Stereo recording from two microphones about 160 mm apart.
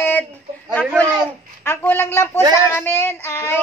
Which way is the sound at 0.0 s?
10° left (ahead or behind).